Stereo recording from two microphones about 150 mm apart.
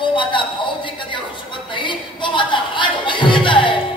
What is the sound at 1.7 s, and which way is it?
Music, 30° left (ahead or behind).